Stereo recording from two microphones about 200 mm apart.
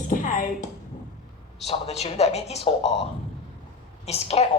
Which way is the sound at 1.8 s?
35° left (ahead or behind).